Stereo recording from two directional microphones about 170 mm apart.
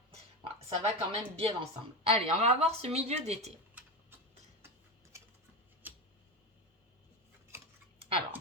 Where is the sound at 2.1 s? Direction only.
40° right (ahead or behind).